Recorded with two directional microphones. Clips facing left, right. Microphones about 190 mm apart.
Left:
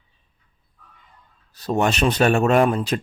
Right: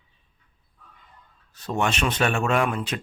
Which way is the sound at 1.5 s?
40° left (ahead or behind).